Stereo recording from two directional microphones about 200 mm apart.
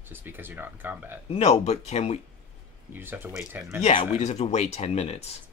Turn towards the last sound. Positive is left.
turn(degrees=30)  # may be behind; listen again after turning